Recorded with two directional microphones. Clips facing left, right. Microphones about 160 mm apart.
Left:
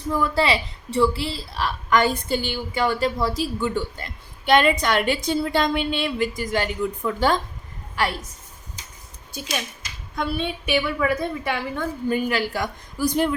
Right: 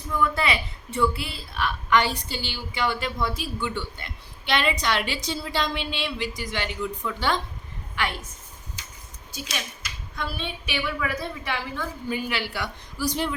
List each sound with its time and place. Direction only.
0.1 s a woman's voice: 30° left (ahead or behind)
10.2 s a woman's voice: 50° left (ahead or behind)